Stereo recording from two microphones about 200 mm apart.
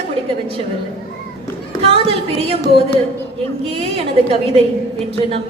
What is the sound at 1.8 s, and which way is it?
A woman's voice, 30° right (ahead or behind).